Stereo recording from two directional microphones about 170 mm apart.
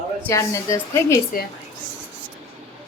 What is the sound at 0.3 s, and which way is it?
Speech, 20° left (ahead or behind).